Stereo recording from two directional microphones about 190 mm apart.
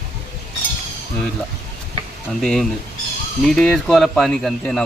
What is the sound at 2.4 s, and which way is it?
Speech, 5° left (ahead or behind).